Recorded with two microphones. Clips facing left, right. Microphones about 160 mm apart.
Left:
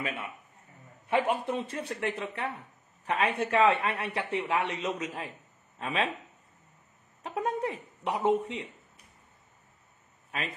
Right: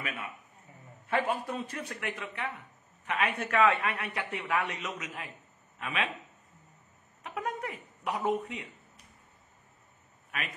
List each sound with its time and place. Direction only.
1.1 s speech: 20° left (ahead or behind)
7.2 s speech: 25° left (ahead or behind)
10.3 s a man's voice: 30° left (ahead or behind)